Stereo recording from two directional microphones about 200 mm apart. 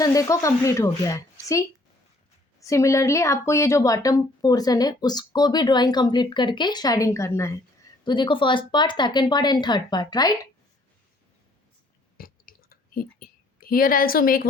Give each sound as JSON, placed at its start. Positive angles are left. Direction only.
{"t": 0.0, "sound": "a woman's voice", "side_deg": 15}
{"t": 12.1, "sound": "clicking", "side_deg": 45}